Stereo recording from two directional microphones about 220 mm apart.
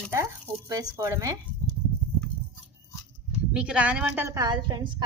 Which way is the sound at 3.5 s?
5° right (ahead or behind).